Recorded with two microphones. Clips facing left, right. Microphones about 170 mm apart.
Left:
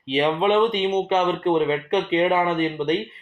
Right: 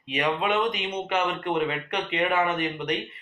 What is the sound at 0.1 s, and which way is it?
Speech, 30° left (ahead or behind).